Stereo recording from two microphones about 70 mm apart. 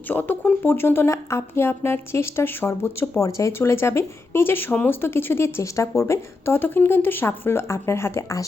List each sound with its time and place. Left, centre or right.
0.1 s a woman's voice: left
6.0 s a woman's voice: left